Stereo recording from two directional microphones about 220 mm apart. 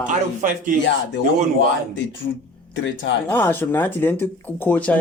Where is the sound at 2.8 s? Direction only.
55° left (ahead or behind).